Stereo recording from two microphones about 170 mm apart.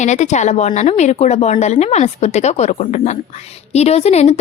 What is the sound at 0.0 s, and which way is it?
A woman's voice, 45° left (ahead or behind).